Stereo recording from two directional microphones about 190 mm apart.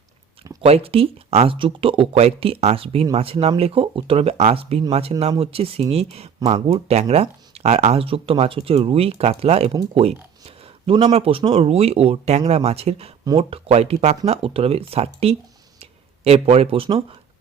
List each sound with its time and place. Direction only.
0.6 s speech: 30° right (ahead or behind)